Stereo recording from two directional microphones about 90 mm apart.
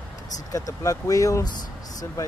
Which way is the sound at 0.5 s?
40° left (ahead or behind).